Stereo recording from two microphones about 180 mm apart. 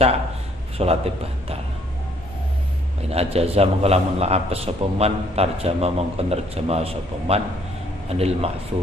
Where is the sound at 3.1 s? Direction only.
35° right (ahead or behind).